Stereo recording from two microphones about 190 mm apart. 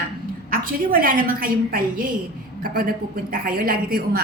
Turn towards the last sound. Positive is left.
turn(degrees=-50)  # may be behind; listen again after turning